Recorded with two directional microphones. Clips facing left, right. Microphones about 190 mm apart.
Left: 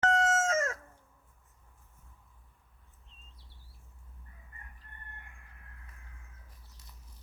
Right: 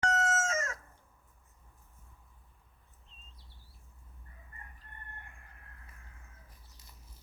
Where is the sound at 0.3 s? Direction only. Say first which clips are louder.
Left 4 dB; 55° left (ahead or behind).